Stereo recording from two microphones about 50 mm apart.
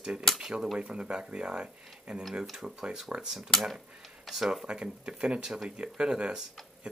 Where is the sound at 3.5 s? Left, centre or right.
Centre.